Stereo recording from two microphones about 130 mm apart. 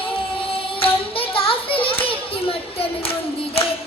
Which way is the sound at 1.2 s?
45° left (ahead or behind).